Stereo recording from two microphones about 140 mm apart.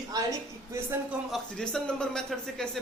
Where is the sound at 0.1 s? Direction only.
25° right (ahead or behind).